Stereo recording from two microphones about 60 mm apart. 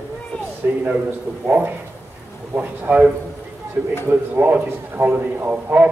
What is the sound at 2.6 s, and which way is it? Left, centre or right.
Speech, right.